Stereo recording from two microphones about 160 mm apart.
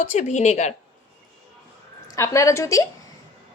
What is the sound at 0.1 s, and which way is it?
Speech, 50° left (ahead or behind).